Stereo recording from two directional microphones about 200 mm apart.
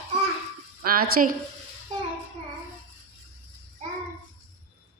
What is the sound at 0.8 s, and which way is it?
Speech, 50° right (ahead or behind).